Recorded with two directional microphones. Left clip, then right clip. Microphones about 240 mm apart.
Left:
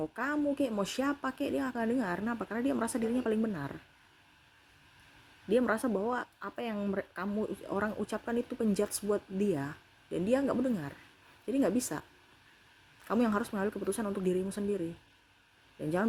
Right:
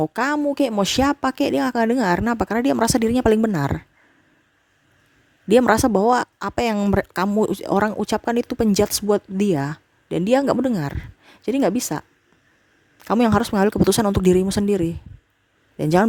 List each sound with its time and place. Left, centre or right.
0.0 s speech: right
5.5 s speech: right
13.1 s speech: right
15.8 s speech: right